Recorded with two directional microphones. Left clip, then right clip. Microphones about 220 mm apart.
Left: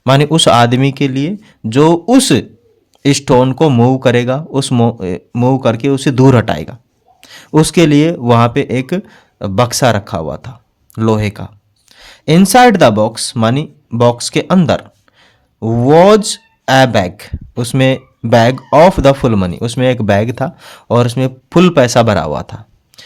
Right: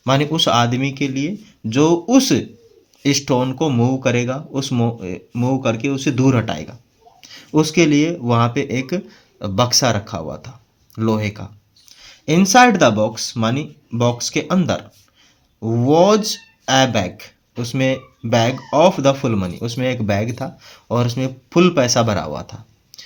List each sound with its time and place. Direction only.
0.0 s speech: 45° left (ahead or behind)